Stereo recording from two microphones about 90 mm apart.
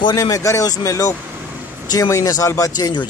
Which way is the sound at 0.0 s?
45° left (ahead or behind).